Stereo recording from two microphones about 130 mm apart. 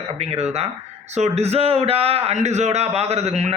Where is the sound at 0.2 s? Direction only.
55° right (ahead or behind).